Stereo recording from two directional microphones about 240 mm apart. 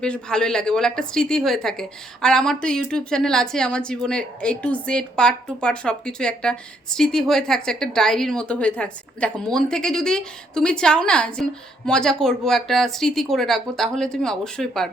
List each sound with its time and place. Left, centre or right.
0.0 s a woman's voice: centre